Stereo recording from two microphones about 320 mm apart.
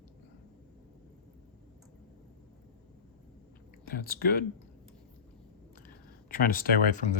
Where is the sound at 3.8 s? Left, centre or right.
Left.